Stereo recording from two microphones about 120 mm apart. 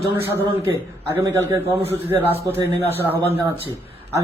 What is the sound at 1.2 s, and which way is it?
Speech, 20° right (ahead or behind).